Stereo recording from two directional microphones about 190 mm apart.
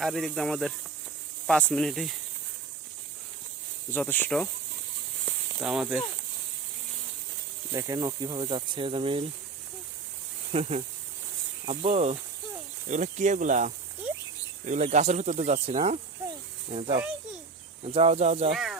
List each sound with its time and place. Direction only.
0.0 s speech: centre (ahead or behind)
3.9 s speech: 10° left (ahead or behind)
5.5 s speech: 5° right (ahead or behind)
7.7 s speech: 15° right (ahead or behind)
10.5 s speech: 35° right (ahead or behind)
18.5 s speech: centre (ahead or behind)